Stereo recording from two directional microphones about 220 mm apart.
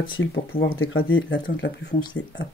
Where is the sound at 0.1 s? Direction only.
65° left (ahead or behind).